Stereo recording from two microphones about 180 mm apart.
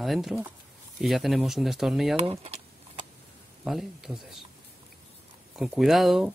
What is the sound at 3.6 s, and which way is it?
Speech, centre (ahead or behind).